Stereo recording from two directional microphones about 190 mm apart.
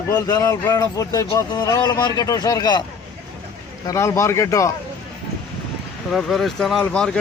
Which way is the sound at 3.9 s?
15° left (ahead or behind).